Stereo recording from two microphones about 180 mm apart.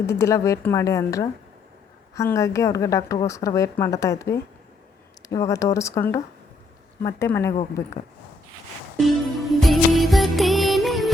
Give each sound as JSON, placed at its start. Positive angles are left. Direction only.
{"t": 0.0, "sound": "a woman's voice", "side_deg": 15}
{"t": 9.0, "sound": "music", "side_deg": 0}